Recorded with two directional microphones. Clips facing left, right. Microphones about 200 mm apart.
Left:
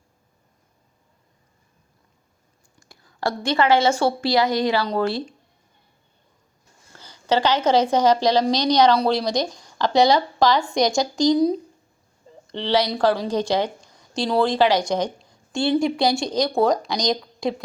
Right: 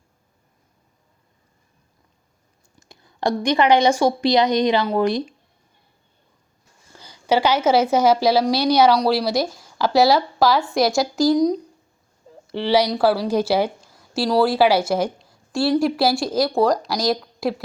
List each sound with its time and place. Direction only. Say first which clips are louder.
2.9 s a woman's voice: right 4 dB; 20° right (ahead or behind)
6.9 s a woman's voice: right 2 dB; 10° right (ahead or behind); by 11.6 s 5° left (ahead or behind)
12.3 s a sound: right 3 dB; 5° right (ahead or behind)
12.9 s speech: right 2 dB; 10° right (ahead or behind)